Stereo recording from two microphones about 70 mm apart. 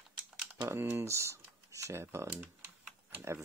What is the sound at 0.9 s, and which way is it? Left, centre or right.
Speech, right.